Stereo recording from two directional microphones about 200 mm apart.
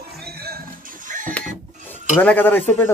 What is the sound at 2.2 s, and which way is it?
Speech, 10° left (ahead or behind).